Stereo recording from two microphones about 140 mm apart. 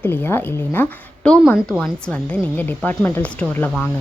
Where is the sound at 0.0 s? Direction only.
15° left (ahead or behind).